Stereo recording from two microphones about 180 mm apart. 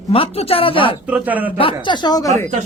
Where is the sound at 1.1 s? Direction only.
10° right (ahead or behind).